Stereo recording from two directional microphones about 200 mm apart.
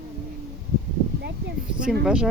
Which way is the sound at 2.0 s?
5° right (ahead or behind).